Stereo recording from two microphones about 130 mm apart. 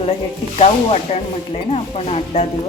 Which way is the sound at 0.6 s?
50° left (ahead or behind).